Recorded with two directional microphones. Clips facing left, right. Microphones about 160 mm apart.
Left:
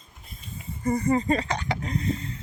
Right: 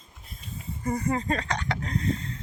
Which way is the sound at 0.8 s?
Centre (ahead or behind).